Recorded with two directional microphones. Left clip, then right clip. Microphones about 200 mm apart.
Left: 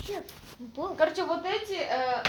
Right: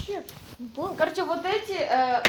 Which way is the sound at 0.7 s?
40° right (ahead or behind).